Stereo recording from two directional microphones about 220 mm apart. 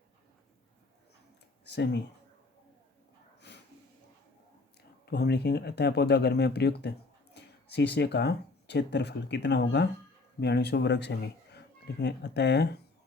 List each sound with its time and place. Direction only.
1.6 s speech: 50° left (ahead or behind)
5.0 s speech: 50° left (ahead or behind)